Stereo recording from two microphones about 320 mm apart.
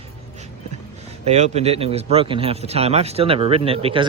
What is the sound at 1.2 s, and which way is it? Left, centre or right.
Speech, right.